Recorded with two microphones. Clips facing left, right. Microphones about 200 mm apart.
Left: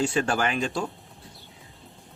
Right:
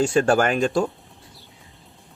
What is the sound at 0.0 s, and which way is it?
Speech, 45° right (ahead or behind).